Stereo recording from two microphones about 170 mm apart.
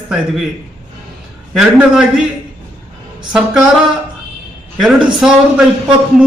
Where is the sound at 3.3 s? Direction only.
5° right (ahead or behind).